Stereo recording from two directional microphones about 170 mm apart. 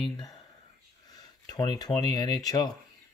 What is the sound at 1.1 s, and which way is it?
Speech, 25° left (ahead or behind).